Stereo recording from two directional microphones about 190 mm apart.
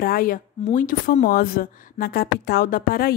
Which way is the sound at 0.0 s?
50° left (ahead or behind).